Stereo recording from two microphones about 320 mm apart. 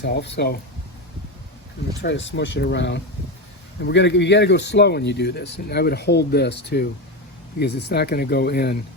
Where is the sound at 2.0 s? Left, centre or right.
Left.